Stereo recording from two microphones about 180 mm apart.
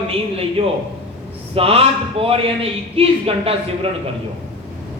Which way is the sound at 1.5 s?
30° right (ahead or behind).